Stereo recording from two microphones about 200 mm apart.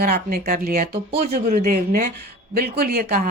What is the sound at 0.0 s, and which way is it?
A woman's voice, 50° right (ahead or behind).